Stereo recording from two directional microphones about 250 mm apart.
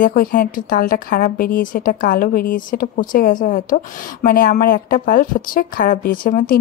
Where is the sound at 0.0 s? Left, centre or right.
Left.